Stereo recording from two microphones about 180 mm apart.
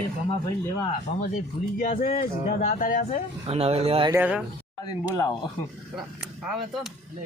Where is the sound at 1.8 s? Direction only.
50° left (ahead or behind).